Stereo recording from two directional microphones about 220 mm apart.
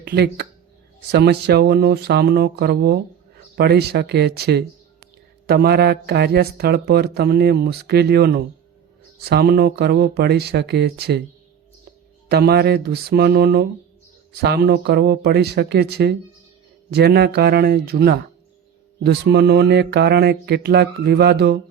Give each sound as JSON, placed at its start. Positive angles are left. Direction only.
{"t": 0.0, "sound": "a man's voice", "side_deg": -50}
{"t": 12.3, "sound": "a man's voice", "side_deg": -45}